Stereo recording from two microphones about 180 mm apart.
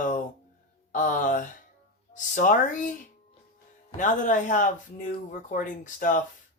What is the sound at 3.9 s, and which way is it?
Speech, 45° left (ahead or behind).